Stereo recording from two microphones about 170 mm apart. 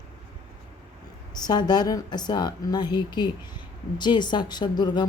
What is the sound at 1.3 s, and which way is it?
A woman's voice, 25° left (ahead or behind).